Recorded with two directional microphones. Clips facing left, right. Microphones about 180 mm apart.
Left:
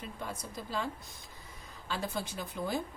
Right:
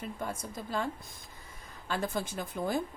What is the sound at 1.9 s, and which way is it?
Speech, 50° right (ahead or behind).